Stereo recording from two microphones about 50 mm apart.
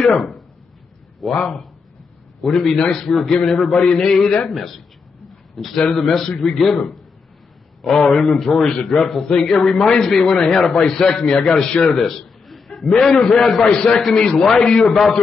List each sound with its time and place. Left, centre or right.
0.0 s speech: centre
1.3 s a man's voice: centre
7.8 s a man's voice: centre
14.7 s a man's voice: centre